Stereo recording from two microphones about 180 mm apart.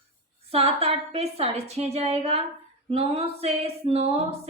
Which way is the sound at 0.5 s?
35° right (ahead or behind).